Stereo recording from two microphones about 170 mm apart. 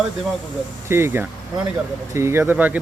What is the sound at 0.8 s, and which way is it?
Speech, 15° right (ahead or behind).